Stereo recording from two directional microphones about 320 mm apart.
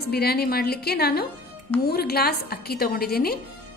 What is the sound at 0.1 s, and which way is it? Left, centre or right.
A woman's voice, left.